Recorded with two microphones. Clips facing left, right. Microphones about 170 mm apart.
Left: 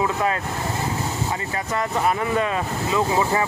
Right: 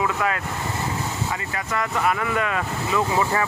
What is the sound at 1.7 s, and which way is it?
Speech, 25° left (ahead or behind).